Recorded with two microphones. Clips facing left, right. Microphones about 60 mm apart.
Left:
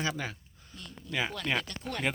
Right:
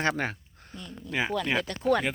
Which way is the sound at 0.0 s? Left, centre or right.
Right.